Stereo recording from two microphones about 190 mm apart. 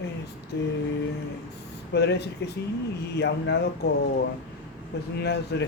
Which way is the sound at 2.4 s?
60° left (ahead or behind).